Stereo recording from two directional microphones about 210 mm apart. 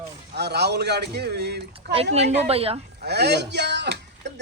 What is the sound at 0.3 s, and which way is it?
A man's voice, 55° right (ahead or behind).